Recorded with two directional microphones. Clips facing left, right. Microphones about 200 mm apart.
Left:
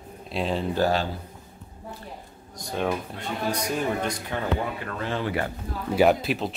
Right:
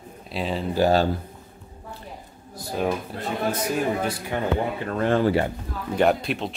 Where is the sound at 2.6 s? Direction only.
5° right (ahead or behind).